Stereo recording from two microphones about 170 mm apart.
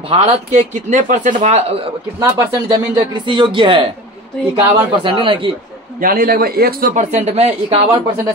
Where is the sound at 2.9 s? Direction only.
25° right (ahead or behind).